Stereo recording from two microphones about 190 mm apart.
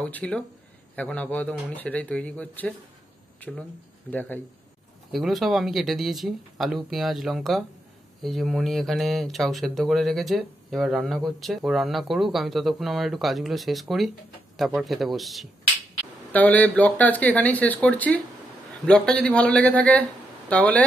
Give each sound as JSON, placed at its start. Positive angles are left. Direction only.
{"t": 0.0, "sound": "speech", "side_deg": 5}